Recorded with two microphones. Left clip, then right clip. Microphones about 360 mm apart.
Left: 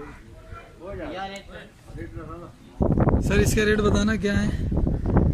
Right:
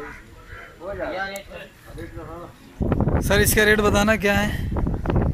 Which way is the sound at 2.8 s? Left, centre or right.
Left.